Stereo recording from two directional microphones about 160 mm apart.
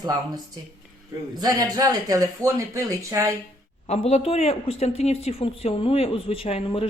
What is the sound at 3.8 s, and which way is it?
Speech, 40° left (ahead or behind).